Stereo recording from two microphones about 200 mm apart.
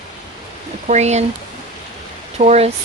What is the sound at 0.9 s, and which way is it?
Speech, 35° right (ahead or behind).